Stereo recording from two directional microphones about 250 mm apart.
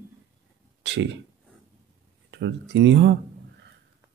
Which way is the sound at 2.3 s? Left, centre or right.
Right.